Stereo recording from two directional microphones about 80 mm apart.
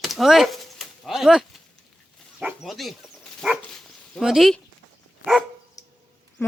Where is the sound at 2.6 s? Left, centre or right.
Centre.